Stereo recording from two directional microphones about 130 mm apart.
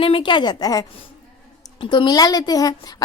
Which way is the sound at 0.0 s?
40° left (ahead or behind).